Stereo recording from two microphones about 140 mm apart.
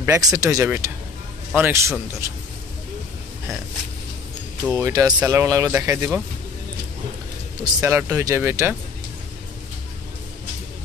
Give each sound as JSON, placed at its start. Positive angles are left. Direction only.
{"t": 0.0, "sound": "speech", "side_deg": -20}
{"t": 4.7, "sound": "speech", "side_deg": -25}
{"t": 7.6, "sound": "speech", "side_deg": -20}